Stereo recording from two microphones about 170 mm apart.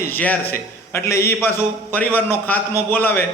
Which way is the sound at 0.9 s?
15° left (ahead or behind).